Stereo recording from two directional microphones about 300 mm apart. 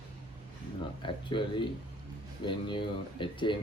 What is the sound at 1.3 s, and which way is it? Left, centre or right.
Speech, centre.